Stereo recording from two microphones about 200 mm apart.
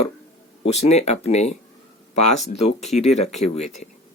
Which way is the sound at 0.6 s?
35° left (ahead or behind).